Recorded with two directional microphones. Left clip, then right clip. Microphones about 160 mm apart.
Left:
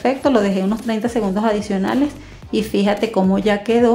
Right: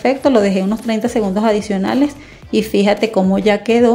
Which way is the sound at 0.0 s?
20° right (ahead or behind).